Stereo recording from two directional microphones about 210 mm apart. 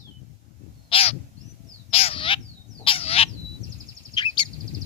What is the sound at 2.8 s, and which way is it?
Fowl, 25° left (ahead or behind).